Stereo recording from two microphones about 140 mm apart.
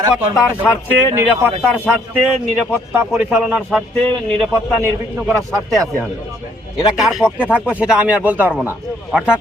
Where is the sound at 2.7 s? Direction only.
15° right (ahead or behind).